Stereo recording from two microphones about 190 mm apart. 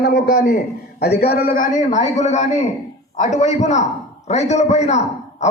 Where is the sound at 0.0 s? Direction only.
55° left (ahead or behind).